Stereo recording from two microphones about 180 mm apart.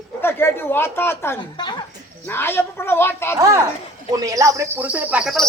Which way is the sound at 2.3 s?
10° left (ahead or behind).